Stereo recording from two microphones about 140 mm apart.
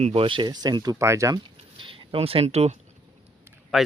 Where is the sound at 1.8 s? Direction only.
40° right (ahead or behind).